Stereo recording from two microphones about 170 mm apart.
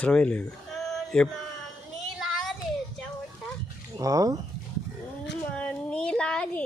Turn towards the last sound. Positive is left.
turn(degrees=5)  # may be behind; listen again after turning